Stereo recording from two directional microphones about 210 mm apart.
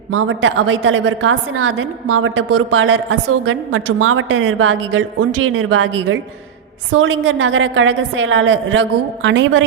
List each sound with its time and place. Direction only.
0.1 s a woman's voice: 70° right (ahead or behind)